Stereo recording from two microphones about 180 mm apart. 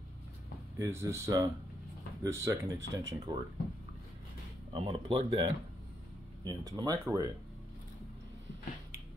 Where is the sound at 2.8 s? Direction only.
80° right.